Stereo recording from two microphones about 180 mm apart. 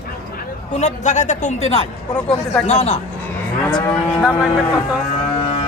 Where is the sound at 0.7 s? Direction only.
40° left (ahead or behind).